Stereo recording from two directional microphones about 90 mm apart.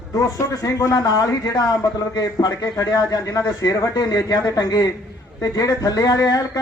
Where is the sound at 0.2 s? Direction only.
40° left (ahead or behind).